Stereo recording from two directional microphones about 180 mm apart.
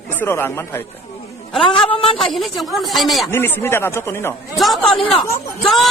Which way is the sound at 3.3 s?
10° left (ahead or behind).